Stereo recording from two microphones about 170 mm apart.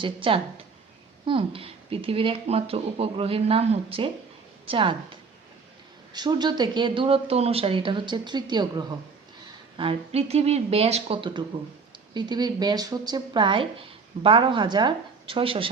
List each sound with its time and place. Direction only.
0.0 s speech: 30° right (ahead or behind)
6.1 s speech: 25° right (ahead or behind)
9.7 s speech: 35° right (ahead or behind)